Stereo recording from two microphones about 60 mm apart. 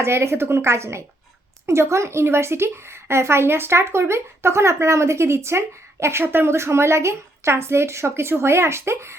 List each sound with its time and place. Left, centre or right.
0.0 s speech: right